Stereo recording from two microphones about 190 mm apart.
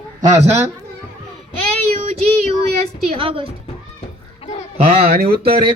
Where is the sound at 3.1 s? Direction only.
30° right (ahead or behind).